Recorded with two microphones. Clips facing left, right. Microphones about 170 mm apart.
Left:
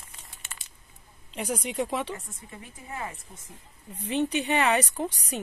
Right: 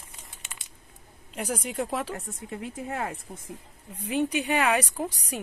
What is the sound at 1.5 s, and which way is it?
Speech, 5° right (ahead or behind).